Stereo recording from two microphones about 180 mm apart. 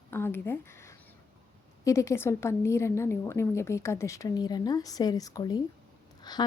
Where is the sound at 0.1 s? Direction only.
15° left (ahead or behind).